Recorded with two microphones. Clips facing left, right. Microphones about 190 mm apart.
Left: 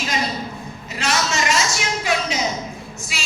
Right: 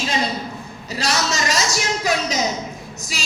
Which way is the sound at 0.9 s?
35° right (ahead or behind).